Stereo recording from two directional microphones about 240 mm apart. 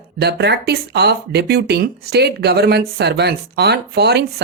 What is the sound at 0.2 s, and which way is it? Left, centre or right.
Speech, right.